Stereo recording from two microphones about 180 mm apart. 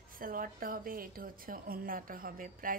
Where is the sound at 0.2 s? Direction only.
50° right (ahead or behind).